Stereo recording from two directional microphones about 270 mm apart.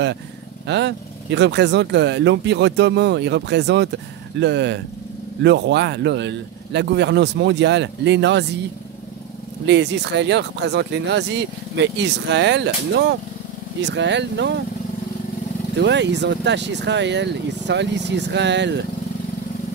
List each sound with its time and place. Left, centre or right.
0.7 s speech: right
9.7 s speech: right
15.8 s speech: right